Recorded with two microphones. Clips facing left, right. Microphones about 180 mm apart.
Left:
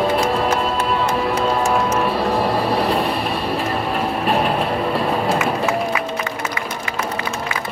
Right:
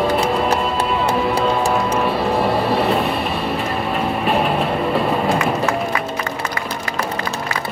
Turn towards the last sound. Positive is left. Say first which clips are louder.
# right 1 dB
turn(degrees=0)  # may be behind; listen again after turning